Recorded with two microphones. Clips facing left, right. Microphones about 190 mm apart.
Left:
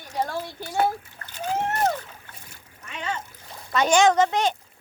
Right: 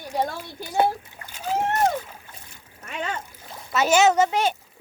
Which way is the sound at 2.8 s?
50° right (ahead or behind).